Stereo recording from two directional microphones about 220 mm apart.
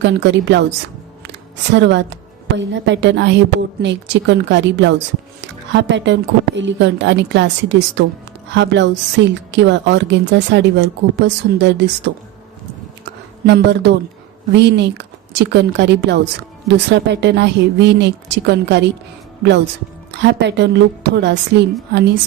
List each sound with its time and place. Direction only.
0.0 s a woman's voice: 55° right (ahead or behind)
13.1 s a sound: 50° right (ahead or behind)
14.5 s speech: 50° right (ahead or behind)